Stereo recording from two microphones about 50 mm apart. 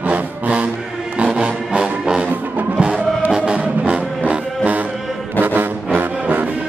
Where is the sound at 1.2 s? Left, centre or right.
Right.